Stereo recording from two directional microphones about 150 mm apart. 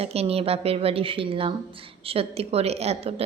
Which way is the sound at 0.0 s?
40° right (ahead or behind).